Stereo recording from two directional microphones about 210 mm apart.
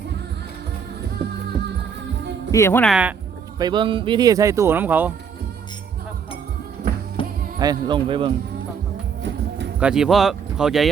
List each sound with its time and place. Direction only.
2.5 s speech: 10° left (ahead or behind)
2.9 s speech: 5° right (ahead or behind)
3.6 s speech: 20° right (ahead or behind)
7.2 s music: 25° left (ahead or behind)
7.6 s speech: 20° right (ahead or behind)
9.8 s speech: 5° right (ahead or behind)